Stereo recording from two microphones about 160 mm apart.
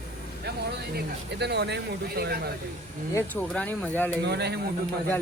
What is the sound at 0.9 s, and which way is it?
Speech, 90° right.